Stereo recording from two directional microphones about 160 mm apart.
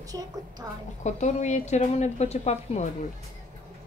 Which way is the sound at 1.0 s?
45° left (ahead or behind).